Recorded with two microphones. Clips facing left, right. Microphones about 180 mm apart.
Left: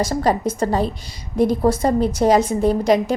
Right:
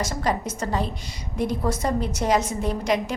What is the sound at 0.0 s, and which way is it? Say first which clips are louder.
A woman's voice: left 7 dB; 35° left (ahead or behind).